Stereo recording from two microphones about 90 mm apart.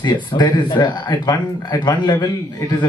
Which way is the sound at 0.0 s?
50° left (ahead or behind).